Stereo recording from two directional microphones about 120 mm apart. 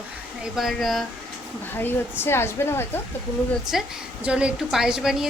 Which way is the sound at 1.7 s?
20° left (ahead or behind).